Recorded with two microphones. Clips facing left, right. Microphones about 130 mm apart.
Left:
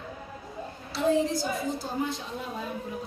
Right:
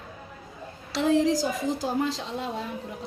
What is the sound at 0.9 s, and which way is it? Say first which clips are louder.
A woman's voice: right 3 dB; 90° right.